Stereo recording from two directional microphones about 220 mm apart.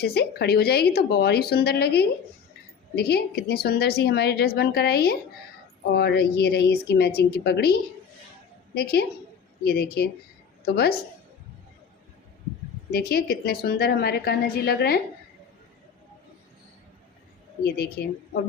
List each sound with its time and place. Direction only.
0.0 s a woman's voice: 45° left (ahead or behind)
12.9 s a woman's voice: 45° left (ahead or behind)
18.0 s a woman's voice: 45° left (ahead or behind)